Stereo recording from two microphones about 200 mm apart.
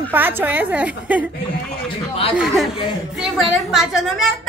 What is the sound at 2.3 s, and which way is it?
Speech, centre (ahead or behind).